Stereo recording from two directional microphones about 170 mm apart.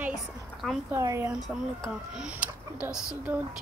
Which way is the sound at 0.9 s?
15° right (ahead or behind).